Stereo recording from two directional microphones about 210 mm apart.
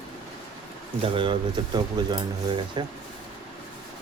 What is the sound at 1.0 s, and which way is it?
Speech, 25° right (ahead or behind).